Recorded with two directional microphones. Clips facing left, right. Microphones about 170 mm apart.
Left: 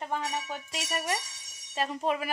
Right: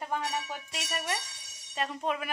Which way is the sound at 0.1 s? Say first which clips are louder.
Even; 5° right (ahead or behind).